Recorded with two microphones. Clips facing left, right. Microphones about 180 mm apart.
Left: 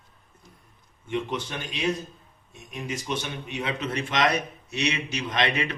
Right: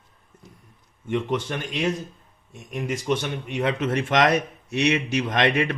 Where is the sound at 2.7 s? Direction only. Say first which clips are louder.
Right 6 dB; 60° right (ahead or behind).